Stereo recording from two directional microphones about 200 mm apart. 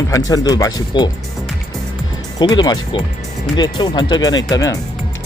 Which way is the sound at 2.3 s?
20° left (ahead or behind).